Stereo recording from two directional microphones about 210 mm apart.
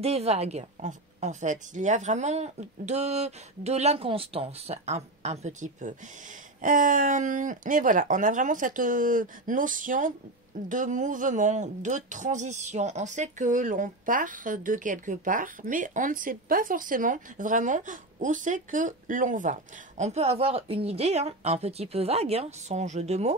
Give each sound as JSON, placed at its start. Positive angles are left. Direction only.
{"t": 0.0, "sound": "speech", "side_deg": -30}